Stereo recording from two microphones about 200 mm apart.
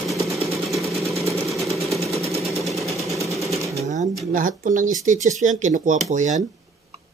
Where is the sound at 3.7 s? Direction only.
35° right (ahead or behind).